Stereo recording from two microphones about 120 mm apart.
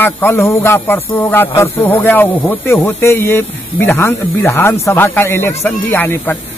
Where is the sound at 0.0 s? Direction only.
20° left (ahead or behind).